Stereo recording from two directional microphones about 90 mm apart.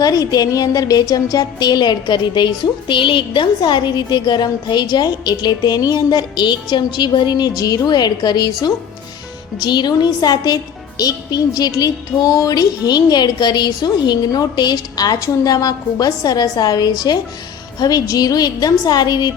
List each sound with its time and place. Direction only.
0.0 s a woman's voice: 45° left (ahead or behind)
9.6 s a woman's voice: 55° left (ahead or behind)